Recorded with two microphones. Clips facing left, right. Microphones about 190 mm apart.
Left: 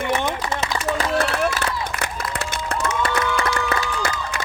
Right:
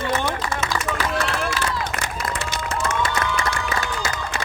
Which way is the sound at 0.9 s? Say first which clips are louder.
Left 6 dB; 45° left (ahead or behind).